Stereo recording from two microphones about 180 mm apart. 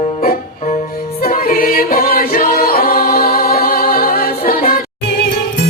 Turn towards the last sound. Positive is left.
turn(degrees=55)  # may be behind; listen again after turning